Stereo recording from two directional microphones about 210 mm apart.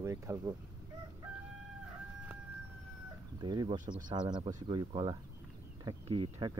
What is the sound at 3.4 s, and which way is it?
Speech, 20° right (ahead or behind).